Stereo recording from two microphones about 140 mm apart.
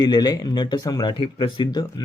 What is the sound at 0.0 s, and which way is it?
Speech, 30° left (ahead or behind).